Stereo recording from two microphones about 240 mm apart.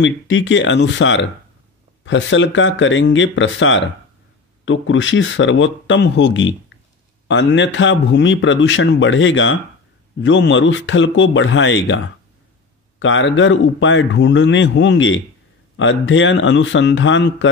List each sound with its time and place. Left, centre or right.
0.0 s a man's voice: left
13.0 s a man's voice: left